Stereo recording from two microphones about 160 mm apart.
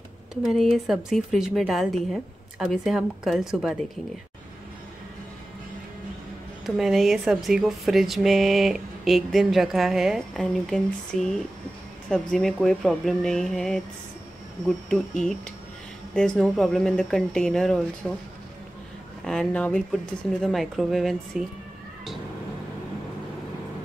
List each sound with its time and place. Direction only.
0.3 s speech: centre (ahead or behind)
6.6 s speech: centre (ahead or behind)
16.3 s speech: centre (ahead or behind)
19.2 s speech: 5° left (ahead or behind)